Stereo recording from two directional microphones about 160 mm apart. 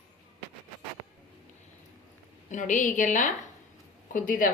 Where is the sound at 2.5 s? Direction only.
50° left (ahead or behind).